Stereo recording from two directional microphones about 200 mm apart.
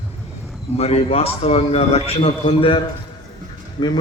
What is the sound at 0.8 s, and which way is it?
A man's voice, 30° left (ahead or behind).